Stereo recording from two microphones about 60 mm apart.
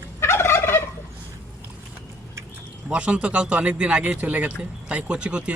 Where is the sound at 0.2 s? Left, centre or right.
Left.